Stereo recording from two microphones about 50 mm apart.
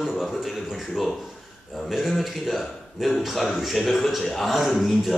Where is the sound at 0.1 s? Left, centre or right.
Centre.